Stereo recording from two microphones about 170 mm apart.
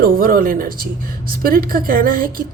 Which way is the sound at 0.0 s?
55° right (ahead or behind).